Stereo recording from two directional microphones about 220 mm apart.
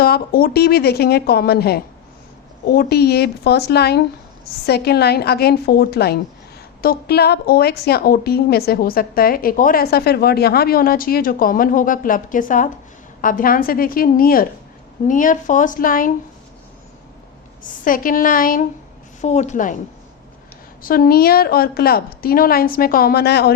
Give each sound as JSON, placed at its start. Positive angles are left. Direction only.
{"t": 0.0, "sound": "a woman's voice", "side_deg": 45}
{"t": 17.8, "sound": "a woman's voice", "side_deg": 40}
{"t": 20.8, "sound": "a woman's voice", "side_deg": 40}